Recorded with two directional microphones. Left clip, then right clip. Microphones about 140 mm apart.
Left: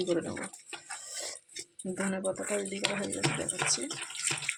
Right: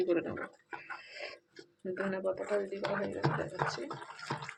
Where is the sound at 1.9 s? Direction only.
50° left (ahead or behind).